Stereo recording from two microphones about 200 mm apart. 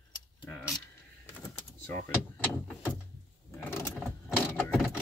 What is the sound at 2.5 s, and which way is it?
Speech, 10° left (ahead or behind).